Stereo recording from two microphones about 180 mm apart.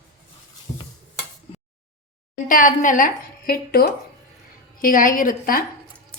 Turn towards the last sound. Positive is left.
turn(degrees=50)  # may be behind; listen again after turning